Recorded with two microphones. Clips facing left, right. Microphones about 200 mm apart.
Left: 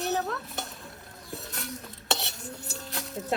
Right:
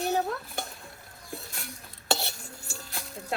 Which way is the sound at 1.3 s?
Centre (ahead or behind).